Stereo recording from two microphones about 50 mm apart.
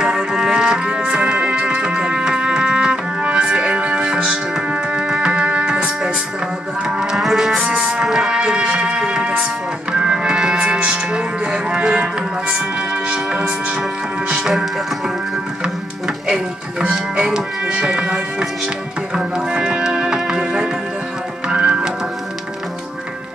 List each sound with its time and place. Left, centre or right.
0.0 s music: centre
7.5 s music: centre
16.8 s music: centre